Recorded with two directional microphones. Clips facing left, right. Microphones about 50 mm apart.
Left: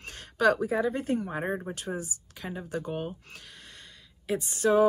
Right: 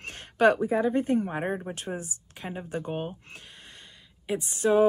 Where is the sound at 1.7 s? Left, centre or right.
Right.